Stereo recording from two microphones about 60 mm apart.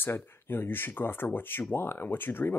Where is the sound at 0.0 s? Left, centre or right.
Left.